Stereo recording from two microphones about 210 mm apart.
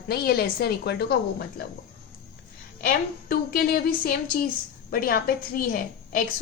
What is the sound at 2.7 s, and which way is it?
A woman's voice, 45° left (ahead or behind).